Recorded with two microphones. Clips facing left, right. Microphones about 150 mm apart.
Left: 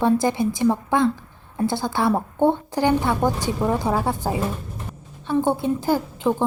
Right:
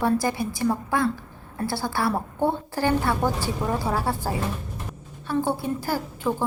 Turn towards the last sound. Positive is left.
turn(degrees=20)  # may be behind; listen again after turning